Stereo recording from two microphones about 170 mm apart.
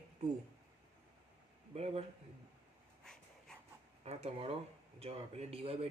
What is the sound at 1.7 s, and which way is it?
Speech, 35° right (ahead or behind).